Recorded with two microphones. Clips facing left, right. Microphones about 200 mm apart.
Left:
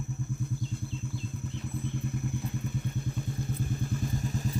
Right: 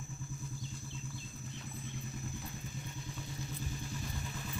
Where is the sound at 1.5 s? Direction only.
60° left (ahead or behind).